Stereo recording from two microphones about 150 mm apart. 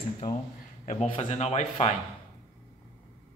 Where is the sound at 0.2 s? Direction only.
40° left (ahead or behind).